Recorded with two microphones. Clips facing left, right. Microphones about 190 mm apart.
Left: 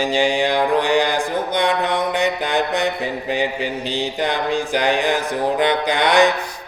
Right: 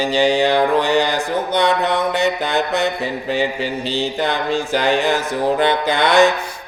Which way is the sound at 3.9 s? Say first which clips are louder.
Right 2 dB; 15° left (ahead or behind).